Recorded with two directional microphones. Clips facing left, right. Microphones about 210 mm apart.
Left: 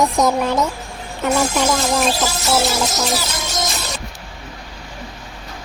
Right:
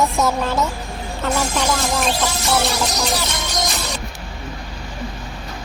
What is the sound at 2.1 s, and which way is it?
Music, centre (ahead or behind).